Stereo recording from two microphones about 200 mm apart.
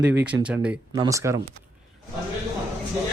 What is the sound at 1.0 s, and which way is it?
Speech, 15° right (ahead or behind).